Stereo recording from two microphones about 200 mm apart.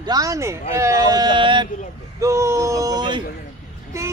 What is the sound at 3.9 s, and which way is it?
Child singing, 15° right (ahead or behind).